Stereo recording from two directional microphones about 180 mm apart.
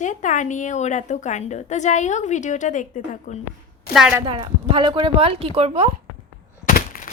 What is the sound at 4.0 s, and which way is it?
Speech, 5° right (ahead or behind).